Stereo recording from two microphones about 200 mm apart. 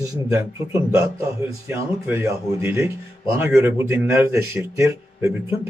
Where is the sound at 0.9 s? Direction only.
10° right (ahead or behind).